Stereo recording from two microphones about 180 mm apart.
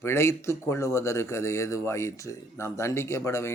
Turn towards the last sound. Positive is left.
turn(degrees=15)  # may be behind; listen again after turning